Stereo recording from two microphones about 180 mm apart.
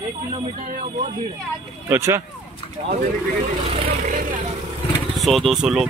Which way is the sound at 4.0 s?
45° right (ahead or behind).